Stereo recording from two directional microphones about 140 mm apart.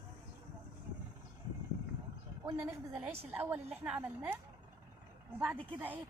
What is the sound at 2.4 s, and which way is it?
A woman's voice, 20° right (ahead or behind).